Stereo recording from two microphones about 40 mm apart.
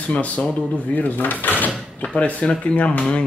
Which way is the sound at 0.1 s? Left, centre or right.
Left.